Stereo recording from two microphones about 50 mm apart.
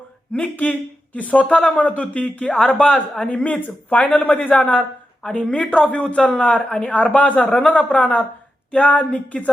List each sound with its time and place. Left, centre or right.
0.3 s speech: left
6.9 s speech: left